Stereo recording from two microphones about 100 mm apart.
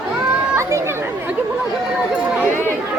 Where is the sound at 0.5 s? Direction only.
30° right (ahead or behind).